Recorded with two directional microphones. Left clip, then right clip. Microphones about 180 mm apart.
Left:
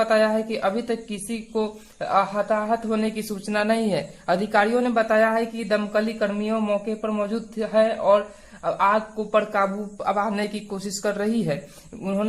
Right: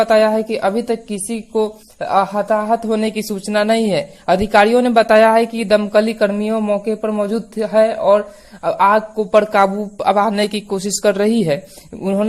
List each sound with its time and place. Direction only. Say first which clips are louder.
0.0 s a woman's voice: right 7 dB; 30° right (ahead or behind)